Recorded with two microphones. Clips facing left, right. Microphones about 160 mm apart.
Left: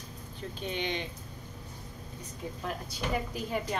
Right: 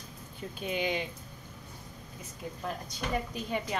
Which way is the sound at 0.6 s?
5° right (ahead or behind).